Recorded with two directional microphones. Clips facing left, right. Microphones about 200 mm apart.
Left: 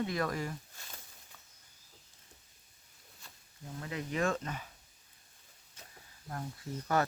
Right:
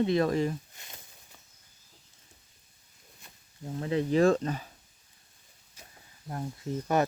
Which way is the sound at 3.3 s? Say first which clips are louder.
Even; 20° right (ahead or behind).